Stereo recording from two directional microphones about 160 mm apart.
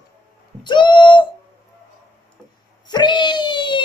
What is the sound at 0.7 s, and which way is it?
Bird, 30° left (ahead or behind).